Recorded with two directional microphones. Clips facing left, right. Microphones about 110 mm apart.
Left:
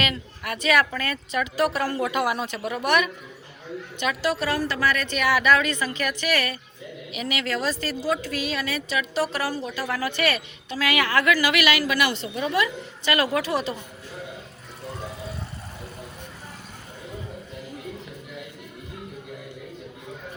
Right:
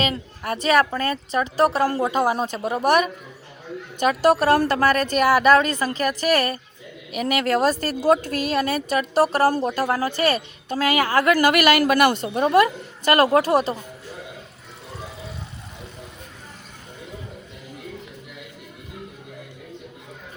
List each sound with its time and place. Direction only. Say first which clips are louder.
0.0 s a woman's voice: right 3 dB; 35° right (ahead or behind)